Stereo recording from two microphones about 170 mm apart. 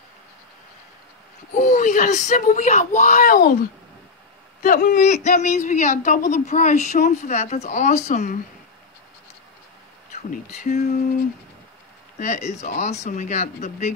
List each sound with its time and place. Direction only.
1.5 s a woman's voice: 50° left (ahead or behind); by 3.5 s 65° left (ahead or behind)
4.6 s a woman's voice: 55° left (ahead or behind)
10.3 s a woman's voice: 45° left (ahead or behind)
12.2 s a woman's voice: 40° left (ahead or behind)